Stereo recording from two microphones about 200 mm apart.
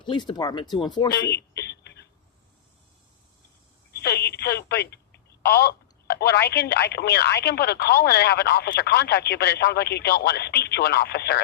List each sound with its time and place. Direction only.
0.0 s speech: 25° left (ahead or behind)
1.1 s a sound: 55° left (ahead or behind)
4.0 s telephone: 55° left (ahead or behind)
6.5 s speech: 55° left (ahead or behind)